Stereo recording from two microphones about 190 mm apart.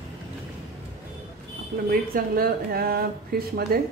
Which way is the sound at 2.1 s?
50° right (ahead or behind).